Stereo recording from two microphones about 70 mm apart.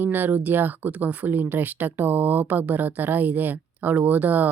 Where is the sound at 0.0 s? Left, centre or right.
Right.